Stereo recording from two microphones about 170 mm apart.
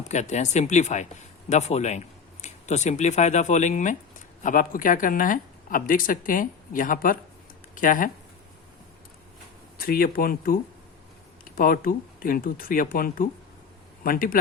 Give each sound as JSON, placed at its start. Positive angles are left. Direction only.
{"t": 0.1, "sound": "speech", "side_deg": 40}
{"t": 9.7, "sound": "speech", "side_deg": 60}